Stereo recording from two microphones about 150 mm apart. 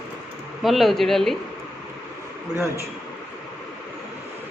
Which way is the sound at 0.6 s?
Centre (ahead or behind).